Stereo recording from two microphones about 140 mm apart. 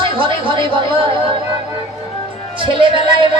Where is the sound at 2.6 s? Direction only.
35° right (ahead or behind).